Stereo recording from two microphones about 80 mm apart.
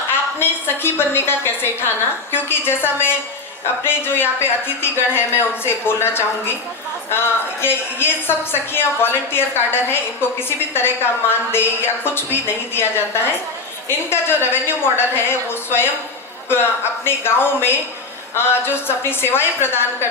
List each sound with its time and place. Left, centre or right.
0.3 s a woman's voice: left